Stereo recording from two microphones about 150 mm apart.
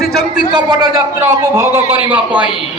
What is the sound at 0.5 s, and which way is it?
A man's voice, 25° right (ahead or behind).